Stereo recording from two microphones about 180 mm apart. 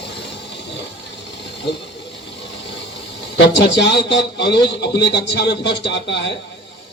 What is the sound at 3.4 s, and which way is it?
A man's voice, 70° left (ahead or behind).